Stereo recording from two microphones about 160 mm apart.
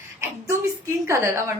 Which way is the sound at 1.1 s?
15° right (ahead or behind).